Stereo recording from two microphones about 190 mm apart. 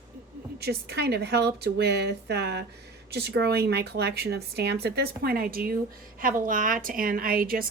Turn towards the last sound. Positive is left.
turn(degrees=-50)  # may be behind; listen again after turning